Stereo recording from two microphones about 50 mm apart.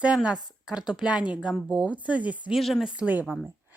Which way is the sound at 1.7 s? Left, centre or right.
Right.